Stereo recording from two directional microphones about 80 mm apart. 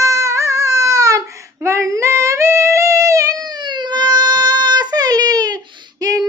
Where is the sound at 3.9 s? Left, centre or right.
Right.